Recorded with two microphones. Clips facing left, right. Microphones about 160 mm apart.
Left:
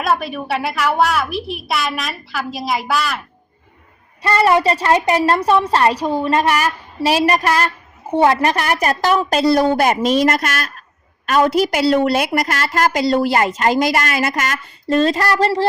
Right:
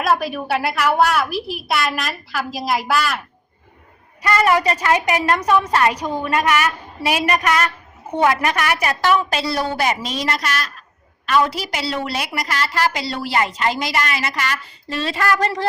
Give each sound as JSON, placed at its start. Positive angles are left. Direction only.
{"t": 0.0, "sound": "a woman's voice", "side_deg": 0}
{"t": 4.2, "sound": "a woman's voice", "side_deg": 30}